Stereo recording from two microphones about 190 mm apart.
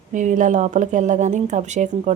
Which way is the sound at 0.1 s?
40° right (ahead or behind).